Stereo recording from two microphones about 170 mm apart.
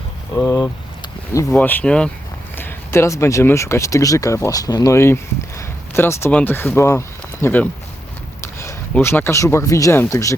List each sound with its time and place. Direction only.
0.3 s speech: 20° left (ahead or behind)